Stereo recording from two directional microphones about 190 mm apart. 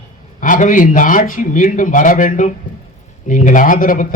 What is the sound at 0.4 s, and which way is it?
A man's voice, 45° left (ahead or behind).